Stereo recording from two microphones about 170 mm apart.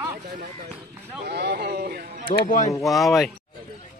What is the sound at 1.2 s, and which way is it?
Speech, 70° right (ahead or behind).